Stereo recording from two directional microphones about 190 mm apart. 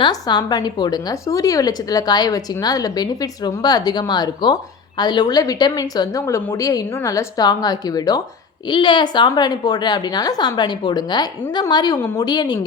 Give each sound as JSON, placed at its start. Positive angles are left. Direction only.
{"t": 0.0, "sound": "a woman's voice", "side_deg": 25}